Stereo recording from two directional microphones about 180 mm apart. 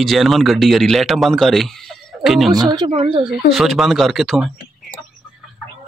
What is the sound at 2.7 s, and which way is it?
Speech, 30° right (ahead or behind).